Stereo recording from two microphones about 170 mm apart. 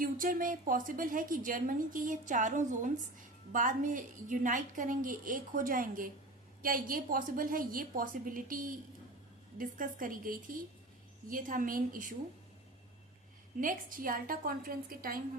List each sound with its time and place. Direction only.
0.0 s a woman's voice: 55° right (ahead or behind)
13.6 s a woman's voice: 55° right (ahead or behind)